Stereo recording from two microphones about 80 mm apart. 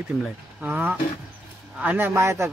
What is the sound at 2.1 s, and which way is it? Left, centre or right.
Speech, right.